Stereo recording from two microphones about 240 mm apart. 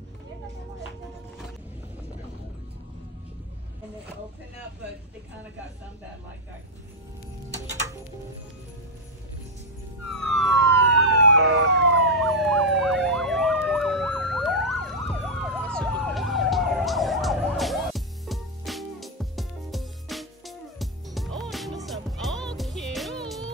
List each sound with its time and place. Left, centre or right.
10.2 s police car: centre
10.6 s emergency vehicle: right
12.0 s emergency vehicle: centre